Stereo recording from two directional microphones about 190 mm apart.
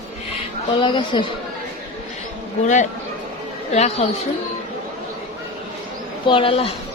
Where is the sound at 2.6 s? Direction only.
40° left (ahead or behind).